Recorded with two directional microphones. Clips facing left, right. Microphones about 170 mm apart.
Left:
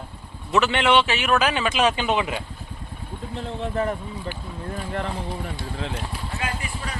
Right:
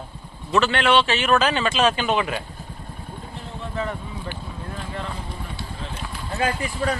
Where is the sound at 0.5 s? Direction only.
20° left (ahead or behind).